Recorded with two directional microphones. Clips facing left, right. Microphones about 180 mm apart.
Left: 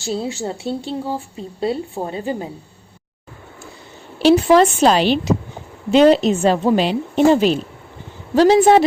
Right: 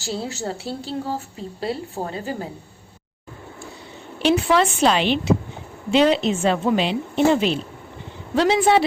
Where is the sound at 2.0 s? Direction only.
Centre (ahead or behind).